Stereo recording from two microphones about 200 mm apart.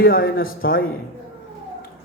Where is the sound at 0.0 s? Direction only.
50° left (ahead or behind).